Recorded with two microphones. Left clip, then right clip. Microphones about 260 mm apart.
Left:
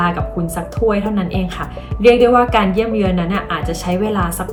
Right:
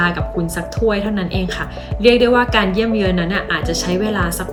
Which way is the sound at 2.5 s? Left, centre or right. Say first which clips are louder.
Left 1 dB; centre.